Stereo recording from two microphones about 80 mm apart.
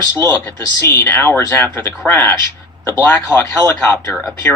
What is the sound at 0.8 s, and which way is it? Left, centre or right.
Speech, left.